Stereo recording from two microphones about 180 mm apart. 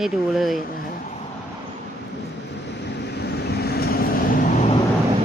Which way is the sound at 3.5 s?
60° left (ahead or behind).